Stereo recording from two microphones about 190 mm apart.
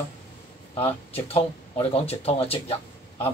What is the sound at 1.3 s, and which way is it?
Speech, 30° left (ahead or behind).